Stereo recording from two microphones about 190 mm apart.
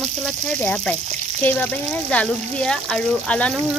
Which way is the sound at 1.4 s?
10° left (ahead or behind).